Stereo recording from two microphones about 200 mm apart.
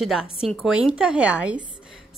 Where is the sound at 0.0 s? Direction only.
Centre (ahead or behind).